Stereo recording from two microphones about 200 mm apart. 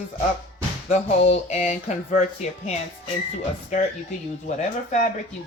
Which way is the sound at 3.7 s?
35° left (ahead or behind).